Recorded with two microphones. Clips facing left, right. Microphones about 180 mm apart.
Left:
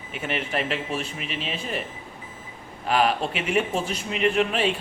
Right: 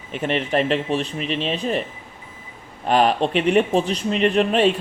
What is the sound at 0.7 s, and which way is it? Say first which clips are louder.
Speech: right 7 dB; 35° right (ahead or behind).